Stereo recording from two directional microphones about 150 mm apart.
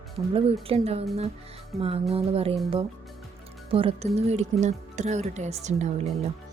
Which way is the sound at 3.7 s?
40° right (ahead or behind).